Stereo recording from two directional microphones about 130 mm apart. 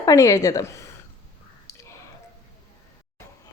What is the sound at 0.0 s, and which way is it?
Speech, 25° left (ahead or behind).